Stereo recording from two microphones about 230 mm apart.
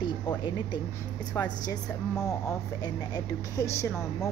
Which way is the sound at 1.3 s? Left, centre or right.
Centre.